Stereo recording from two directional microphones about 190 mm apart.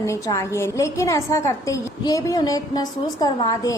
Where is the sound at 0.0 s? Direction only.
15° left (ahead or behind).